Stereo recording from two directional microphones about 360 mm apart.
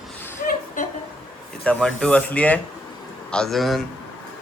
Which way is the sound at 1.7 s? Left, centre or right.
Centre.